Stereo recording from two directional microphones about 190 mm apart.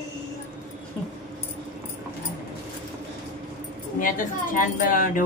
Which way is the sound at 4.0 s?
45° left (ahead or behind).